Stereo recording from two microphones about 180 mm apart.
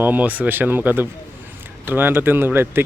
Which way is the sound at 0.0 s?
10° right (ahead or behind).